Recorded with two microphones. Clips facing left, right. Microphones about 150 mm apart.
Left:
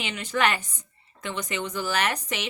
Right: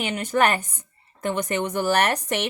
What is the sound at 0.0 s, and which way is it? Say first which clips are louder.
A woman's voice: right 4 dB; 50° right (ahead or behind).